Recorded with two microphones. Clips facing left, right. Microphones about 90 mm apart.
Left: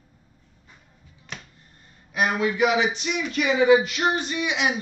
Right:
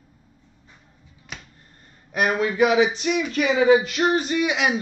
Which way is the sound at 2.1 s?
40° right (ahead or behind).